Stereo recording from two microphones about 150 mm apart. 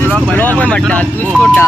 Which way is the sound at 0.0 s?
10° left (ahead or behind).